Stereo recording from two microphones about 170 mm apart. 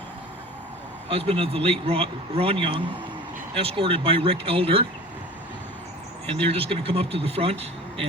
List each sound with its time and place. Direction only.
1.1 s a man's voice: 35° right (ahead or behind)
6.4 s a man's voice: 35° right (ahead or behind)